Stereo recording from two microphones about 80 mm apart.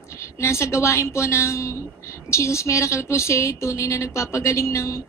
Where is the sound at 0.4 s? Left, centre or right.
Left.